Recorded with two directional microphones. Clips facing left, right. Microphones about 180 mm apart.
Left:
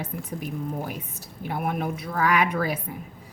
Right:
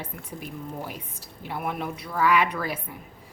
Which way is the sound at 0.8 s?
45° left (ahead or behind).